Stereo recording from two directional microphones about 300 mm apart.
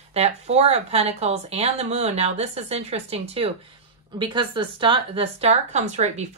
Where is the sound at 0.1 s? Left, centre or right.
Right.